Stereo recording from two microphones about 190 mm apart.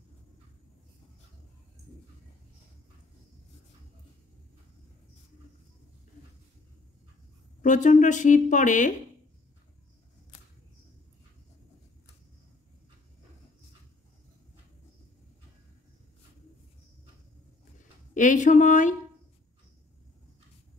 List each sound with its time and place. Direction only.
7.6 s speech: 40° left (ahead or behind)
18.1 s speech: 40° left (ahead or behind)